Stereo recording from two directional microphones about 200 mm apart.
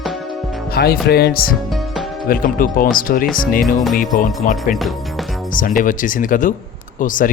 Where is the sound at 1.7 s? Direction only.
Centre (ahead or behind).